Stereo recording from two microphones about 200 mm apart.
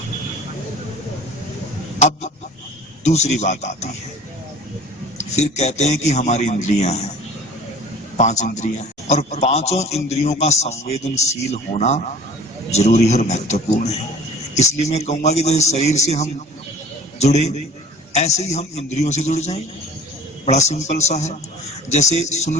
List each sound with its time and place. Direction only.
2.0 s chicken: 35° left (ahead or behind)
3.0 s a man's voice: 35° left (ahead or behind)
5.1 s a man's voice: 35° left (ahead or behind)
8.2 s a man's voice: 35° left (ahead or behind)